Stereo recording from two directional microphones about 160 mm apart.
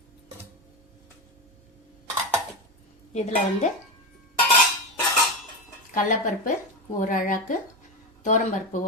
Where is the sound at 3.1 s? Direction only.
45° left (ahead or behind).